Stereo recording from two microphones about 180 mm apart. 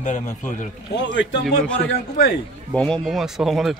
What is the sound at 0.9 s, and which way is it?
Speech, 75° left (ahead or behind).